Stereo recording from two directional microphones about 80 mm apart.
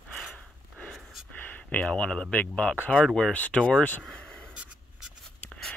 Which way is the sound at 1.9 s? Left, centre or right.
Centre.